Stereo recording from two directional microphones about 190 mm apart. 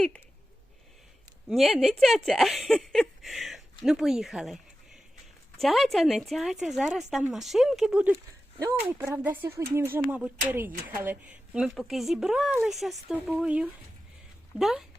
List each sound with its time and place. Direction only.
1.5 s speech: centre (ahead or behind)